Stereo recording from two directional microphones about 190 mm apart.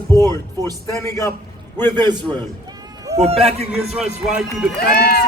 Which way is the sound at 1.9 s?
20° right (ahead or behind).